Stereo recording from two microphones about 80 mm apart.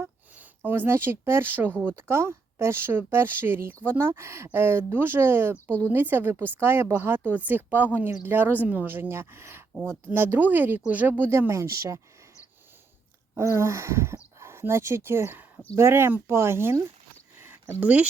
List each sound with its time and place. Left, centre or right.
0.3 s a woman's voice: right
11.3 s speech: right
13.3 s speech: right
15.7 s speech: right
17.7 s speech: centre